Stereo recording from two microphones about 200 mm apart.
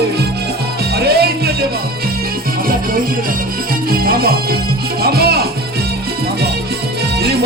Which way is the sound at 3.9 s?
50° right (ahead or behind).